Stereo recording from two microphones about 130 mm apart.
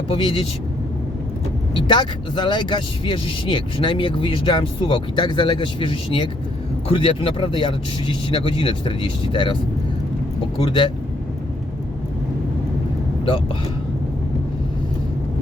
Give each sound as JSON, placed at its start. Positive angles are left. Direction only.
{"t": 0.1, "sound": "speech", "side_deg": 45}
{"t": 1.7, "sound": "speech", "side_deg": 40}
{"t": 10.7, "sound": "speech", "side_deg": 40}